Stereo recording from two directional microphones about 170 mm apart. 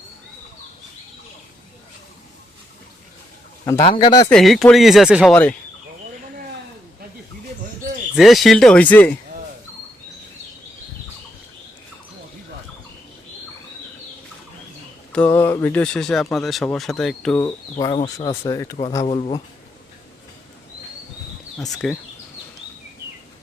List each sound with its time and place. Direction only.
3.8 s speech: 30° left (ahead or behind)
4.3 s speech: centre (ahead or behind)
5.3 s speech: 10° left (ahead or behind)
8.1 s speech: centre (ahead or behind)
15.1 s speech: 10° left (ahead or behind)
17.3 s speech: 20° left (ahead or behind)
19.0 s speech: 30° left (ahead or behind)
21.6 s speech: 5° left (ahead or behind)